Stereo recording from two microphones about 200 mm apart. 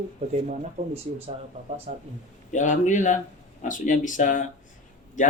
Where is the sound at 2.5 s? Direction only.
40° left (ahead or behind).